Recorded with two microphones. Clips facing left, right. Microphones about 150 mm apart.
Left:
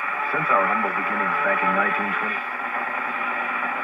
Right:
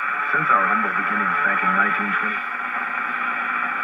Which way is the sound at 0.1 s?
35° left (ahead or behind).